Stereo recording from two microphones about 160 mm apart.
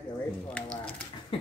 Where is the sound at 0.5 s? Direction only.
5° left (ahead or behind).